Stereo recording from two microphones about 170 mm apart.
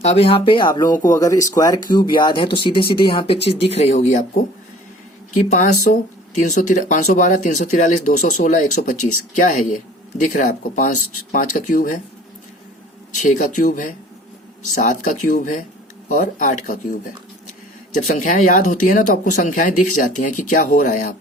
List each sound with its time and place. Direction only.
0.0 s speech: 35° left (ahead or behind)
5.5 s speech: 45° left (ahead or behind)
13.1 s speech: 45° left (ahead or behind)
18.0 s speech: 45° left (ahead or behind)